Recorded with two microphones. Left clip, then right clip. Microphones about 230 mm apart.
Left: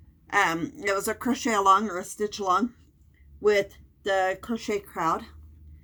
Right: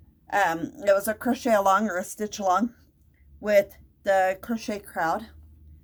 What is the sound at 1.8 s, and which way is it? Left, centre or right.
Speech, right.